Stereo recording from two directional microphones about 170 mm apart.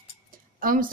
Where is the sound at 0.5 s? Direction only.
55° right (ahead or behind).